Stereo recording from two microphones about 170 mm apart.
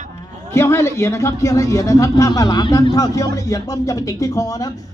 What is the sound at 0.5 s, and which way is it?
Speech, 15° left (ahead or behind).